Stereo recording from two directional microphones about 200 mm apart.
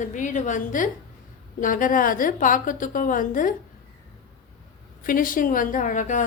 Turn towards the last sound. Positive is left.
turn(degrees=40)  # may be behind; listen again after turning